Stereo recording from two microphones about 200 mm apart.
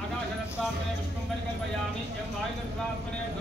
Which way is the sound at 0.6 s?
Centre (ahead or behind).